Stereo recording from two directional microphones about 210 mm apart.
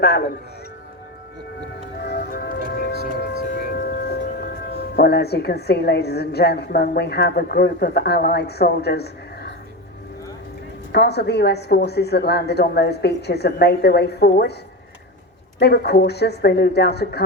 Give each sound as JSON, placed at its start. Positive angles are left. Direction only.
{"t": 2.0, "sound": "music", "side_deg": 50}
{"t": 3.7, "sound": "speech", "side_deg": 50}
{"t": 10.9, "sound": "speech", "side_deg": 50}
{"t": 15.5, "sound": "speech", "side_deg": 50}